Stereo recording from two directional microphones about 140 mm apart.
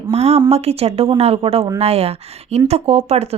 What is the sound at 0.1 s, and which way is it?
A woman's voice, 50° right (ahead or behind).